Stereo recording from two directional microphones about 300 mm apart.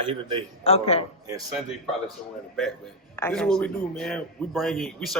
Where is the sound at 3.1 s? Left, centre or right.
Centre.